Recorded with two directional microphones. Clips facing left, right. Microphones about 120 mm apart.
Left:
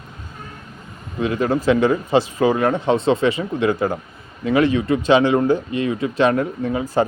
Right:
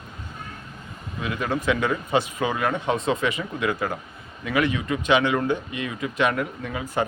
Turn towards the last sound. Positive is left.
turn(degrees=30)  # may be behind; listen again after turning